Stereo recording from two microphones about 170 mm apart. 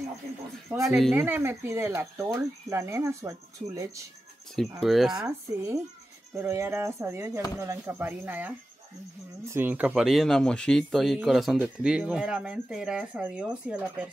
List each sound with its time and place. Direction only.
0.7 s speech: 15° right (ahead or behind)
4.7 s speech: centre (ahead or behind)
5.2 s speech: 15° right (ahead or behind)